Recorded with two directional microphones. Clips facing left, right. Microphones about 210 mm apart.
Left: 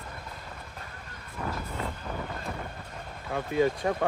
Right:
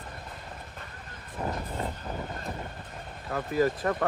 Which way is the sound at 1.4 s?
30° right (ahead or behind).